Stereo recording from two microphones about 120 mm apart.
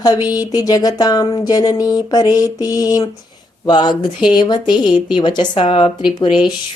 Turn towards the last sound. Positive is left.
turn(degrees=40)  # may be behind; listen again after turning